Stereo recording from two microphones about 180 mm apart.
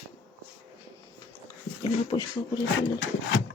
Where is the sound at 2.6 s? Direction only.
90° left.